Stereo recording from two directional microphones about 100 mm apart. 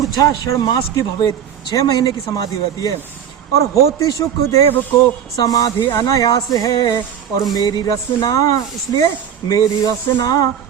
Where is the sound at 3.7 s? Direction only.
30° left (ahead or behind).